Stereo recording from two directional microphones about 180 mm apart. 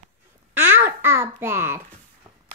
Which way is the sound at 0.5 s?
10° right (ahead or behind).